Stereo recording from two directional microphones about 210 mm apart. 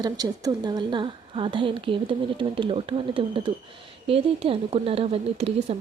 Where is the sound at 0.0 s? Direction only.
20° right (ahead or behind).